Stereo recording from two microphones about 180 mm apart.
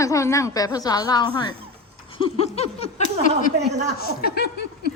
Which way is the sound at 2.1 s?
30° left (ahead or behind).